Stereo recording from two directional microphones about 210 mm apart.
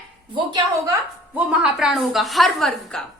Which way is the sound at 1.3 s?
5° right (ahead or behind).